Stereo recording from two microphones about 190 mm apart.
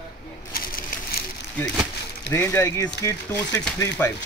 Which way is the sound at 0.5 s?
50° left (ahead or behind).